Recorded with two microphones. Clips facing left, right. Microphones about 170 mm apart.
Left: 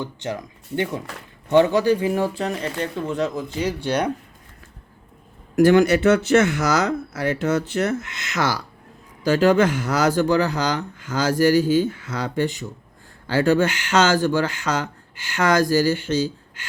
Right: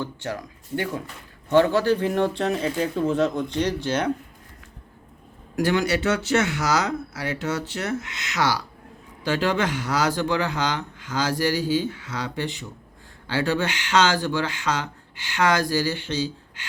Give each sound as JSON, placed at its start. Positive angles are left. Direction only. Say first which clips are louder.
{"t": 0.0, "sound": "speech", "louder": "left 2 dB", "side_deg": 20}
{"t": 5.5, "sound": "speech", "louder": "left 8 dB", "side_deg": 50}